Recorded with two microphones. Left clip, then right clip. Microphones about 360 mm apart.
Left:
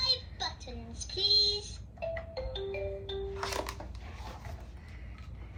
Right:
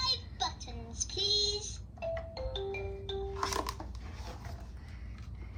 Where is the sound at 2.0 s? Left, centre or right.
Centre.